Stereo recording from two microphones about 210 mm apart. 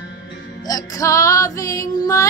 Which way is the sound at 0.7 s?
15° left (ahead or behind).